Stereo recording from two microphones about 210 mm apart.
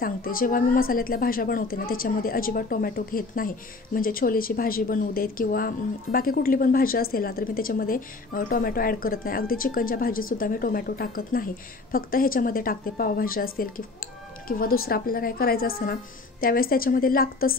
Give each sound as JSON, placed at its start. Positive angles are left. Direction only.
{"t": 0.0, "sound": "a woman's voice", "side_deg": 45}